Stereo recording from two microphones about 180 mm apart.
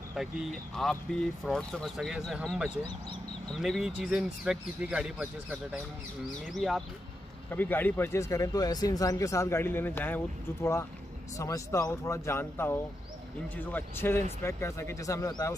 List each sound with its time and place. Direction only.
0.1 s speech: centre (ahead or behind); by 15.5 s 20° left (ahead or behind)